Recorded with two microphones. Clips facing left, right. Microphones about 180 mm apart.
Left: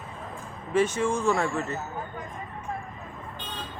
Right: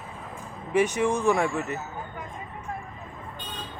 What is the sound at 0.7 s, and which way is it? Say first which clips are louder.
Speech: right 1 dB; 15° right (ahead or behind).